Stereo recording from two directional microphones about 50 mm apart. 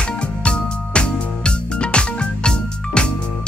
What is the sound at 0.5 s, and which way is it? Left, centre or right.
Music, centre.